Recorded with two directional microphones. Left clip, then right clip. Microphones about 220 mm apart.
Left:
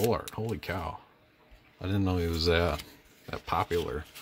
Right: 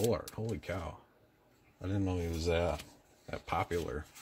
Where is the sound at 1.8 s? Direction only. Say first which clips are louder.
Left 6 dB; 25° left (ahead or behind).